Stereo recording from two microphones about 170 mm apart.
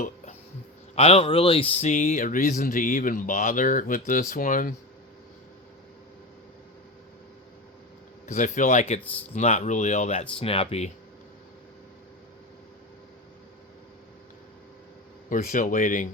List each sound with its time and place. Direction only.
0.9 s speech: 35° left (ahead or behind); by 4.7 s 50° left (ahead or behind)
8.3 s speech: 45° left (ahead or behind)
15.3 s speech: 50° left (ahead or behind)